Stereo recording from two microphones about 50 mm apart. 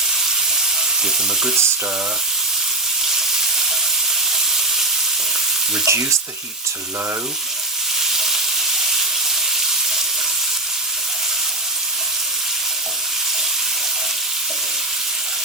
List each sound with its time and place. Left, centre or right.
5.8 s frying: right
8.1 s frying: centre